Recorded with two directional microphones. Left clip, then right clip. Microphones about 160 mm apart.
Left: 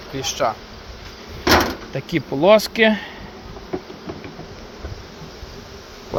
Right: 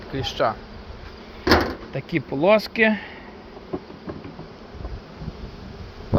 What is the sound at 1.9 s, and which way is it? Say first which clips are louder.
Speech: left 2 dB; 30° left (ahead or behind).